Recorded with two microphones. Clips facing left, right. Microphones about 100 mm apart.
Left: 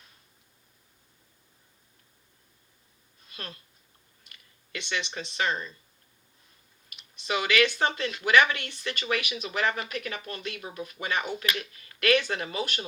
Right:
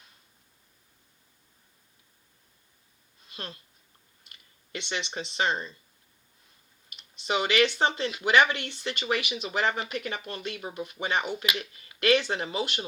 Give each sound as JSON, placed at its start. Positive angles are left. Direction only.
{"t": 3.3, "sound": "speech", "side_deg": -25}
{"t": 6.9, "sound": "speech", "side_deg": -25}